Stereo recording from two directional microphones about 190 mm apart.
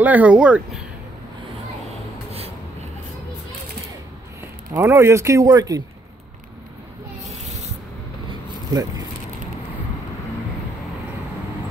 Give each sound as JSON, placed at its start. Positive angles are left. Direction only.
{"t": 0.0, "sound": "speech", "side_deg": -10}
{"t": 4.7, "sound": "speech", "side_deg": -15}
{"t": 8.3, "sound": "a sound", "side_deg": -20}